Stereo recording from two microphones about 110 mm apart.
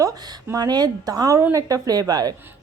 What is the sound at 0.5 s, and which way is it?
A woman's voice, 35° right (ahead or behind).